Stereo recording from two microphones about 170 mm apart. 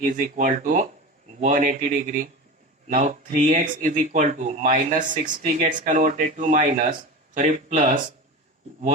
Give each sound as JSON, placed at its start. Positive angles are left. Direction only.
{"t": 0.0, "sound": "speech", "side_deg": -50}
{"t": 2.9, "sound": "speech", "side_deg": -45}